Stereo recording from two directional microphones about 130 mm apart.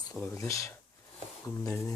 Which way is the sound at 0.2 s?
25° left (ahead or behind).